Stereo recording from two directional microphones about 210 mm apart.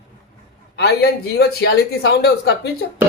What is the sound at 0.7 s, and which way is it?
Speech, 50° left (ahead or behind).